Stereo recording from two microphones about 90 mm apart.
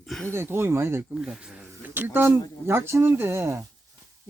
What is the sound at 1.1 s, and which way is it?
Speech, 10° right (ahead or behind).